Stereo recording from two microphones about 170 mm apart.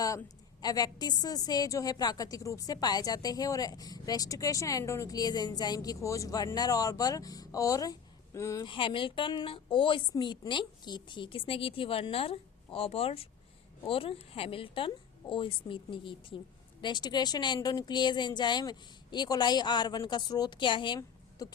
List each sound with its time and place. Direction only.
0.6 s a woman's voice: 20° left (ahead or behind)
8.6 s a woman's voice: 30° left (ahead or behind)